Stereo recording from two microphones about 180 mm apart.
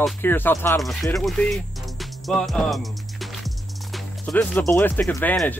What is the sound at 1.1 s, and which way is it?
Speech, centre (ahead or behind).